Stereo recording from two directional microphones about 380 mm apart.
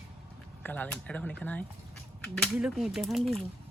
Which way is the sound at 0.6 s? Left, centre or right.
Centre.